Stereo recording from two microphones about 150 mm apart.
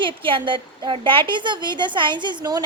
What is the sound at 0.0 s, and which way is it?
A woman's voice, 35° right (ahead or behind).